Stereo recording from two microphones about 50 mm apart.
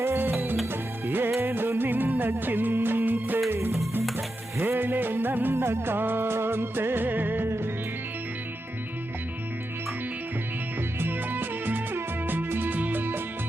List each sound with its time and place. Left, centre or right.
0.0 s music: right
4.8 s music: right
11.0 s music: right